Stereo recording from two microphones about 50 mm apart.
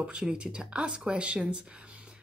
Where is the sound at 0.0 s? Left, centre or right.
Centre.